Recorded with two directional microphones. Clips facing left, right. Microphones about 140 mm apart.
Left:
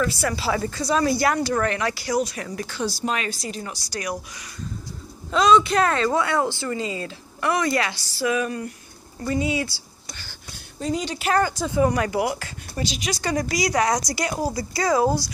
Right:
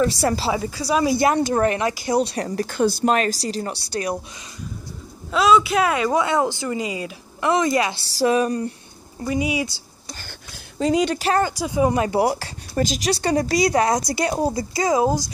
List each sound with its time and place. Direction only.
0.0 s speech: 30° right (ahead or behind)
0.5 s speech: 10° right (ahead or behind); by 4.2 s 30° right (ahead or behind)
5.3 s speech: 5° right (ahead or behind); by 8.0 s 20° right (ahead or behind)
8.0 s speech: 35° right (ahead or behind)
9.2 s speech: 15° right (ahead or behind)
10.8 s speech: 80° right
11.1 s speech: 30° right (ahead or behind)
11.5 s speech: 15° right (ahead or behind); by 12.5 s 35° right (ahead or behind)
12.7 s speech: 45° right (ahead or behind); by 15.2 s 20° right (ahead or behind)